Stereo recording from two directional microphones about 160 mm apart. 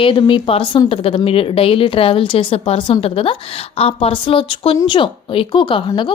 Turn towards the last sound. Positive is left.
turn(degrees=30)  # may be behind; listen again after turning